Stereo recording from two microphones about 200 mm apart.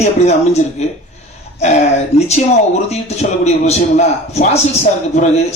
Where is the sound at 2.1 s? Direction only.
35° left (ahead or behind).